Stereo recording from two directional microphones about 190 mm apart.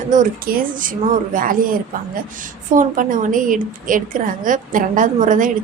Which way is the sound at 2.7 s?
45° right (ahead or behind).